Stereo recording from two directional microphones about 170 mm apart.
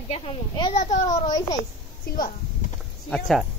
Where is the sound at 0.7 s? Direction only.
45° left (ahead or behind).